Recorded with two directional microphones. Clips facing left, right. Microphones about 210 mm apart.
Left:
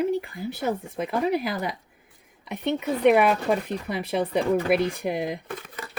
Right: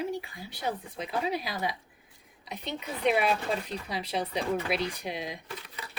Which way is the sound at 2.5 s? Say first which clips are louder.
Left 11 dB; 65° left (ahead or behind).